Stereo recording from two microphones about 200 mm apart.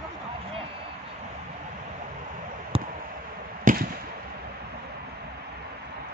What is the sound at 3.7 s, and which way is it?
Fireworks, 40° right (ahead or behind).